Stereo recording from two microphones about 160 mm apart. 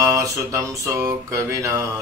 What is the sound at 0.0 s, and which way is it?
Mantra, 20° right (ahead or behind).